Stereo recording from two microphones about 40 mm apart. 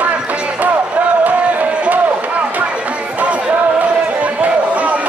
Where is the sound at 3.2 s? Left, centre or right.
Right.